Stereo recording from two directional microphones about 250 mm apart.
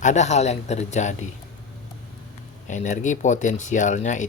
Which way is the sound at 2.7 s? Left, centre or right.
Left.